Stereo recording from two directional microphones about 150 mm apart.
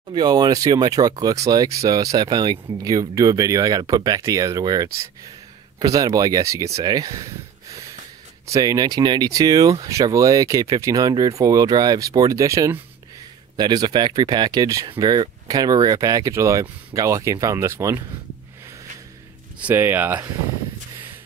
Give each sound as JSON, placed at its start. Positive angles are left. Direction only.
{"t": 0.1, "sound": "speech", "side_deg": -25}
{"t": 19.6, "sound": "speech", "side_deg": -15}